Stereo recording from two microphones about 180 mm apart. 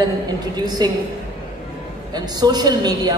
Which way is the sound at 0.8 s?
20° right (ahead or behind).